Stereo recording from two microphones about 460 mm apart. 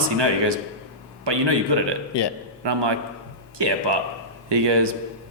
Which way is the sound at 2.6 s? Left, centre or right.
Right.